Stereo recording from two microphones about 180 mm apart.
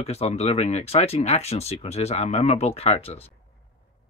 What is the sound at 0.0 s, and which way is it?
Speech, 35° left (ahead or behind).